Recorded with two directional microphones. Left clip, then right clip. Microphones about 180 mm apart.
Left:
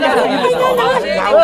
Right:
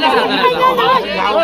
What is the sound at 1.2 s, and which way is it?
Speech, 15° left (ahead or behind).